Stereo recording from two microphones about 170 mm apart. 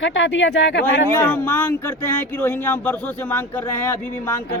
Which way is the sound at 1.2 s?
10° left (ahead or behind).